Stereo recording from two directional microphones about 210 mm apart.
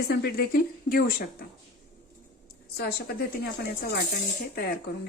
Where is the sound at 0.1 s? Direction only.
50° left (ahead or behind).